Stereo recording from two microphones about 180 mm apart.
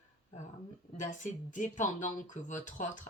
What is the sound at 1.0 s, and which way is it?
Speech, 45° left (ahead or behind).